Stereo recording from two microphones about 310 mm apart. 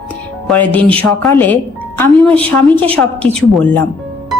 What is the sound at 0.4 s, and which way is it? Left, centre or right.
A man's voice, centre.